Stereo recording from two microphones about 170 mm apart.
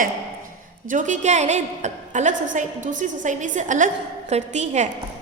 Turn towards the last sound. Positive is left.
turn(degrees=-45)  # may be behind; listen again after turning